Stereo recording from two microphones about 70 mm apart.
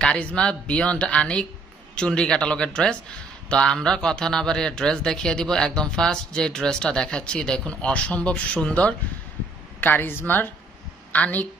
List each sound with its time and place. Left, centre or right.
0.0 s speech: centre
9.8 s a woman's voice: left